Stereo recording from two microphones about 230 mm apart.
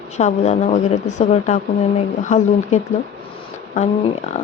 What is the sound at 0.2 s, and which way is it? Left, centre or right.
A woman's voice, left.